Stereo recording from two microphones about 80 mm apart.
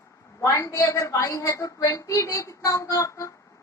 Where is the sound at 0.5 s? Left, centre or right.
Left.